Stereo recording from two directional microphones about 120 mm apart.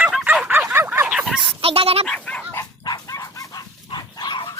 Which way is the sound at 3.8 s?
35° left (ahead or behind).